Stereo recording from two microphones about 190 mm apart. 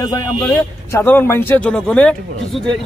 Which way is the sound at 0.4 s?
10° left (ahead or behind).